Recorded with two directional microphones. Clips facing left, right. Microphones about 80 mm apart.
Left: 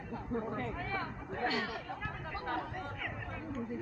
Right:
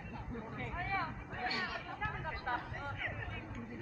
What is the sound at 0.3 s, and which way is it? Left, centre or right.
Speech, left.